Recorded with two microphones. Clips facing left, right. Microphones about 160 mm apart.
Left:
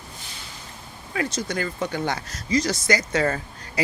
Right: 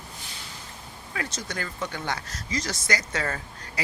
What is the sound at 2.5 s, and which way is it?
Speech, 15° left (ahead or behind).